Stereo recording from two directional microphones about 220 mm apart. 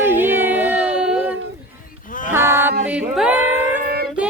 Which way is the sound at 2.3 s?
10° right (ahead or behind).